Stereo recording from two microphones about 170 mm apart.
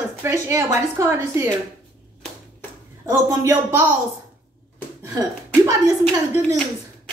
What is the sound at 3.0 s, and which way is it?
Speech, 20° right (ahead or behind).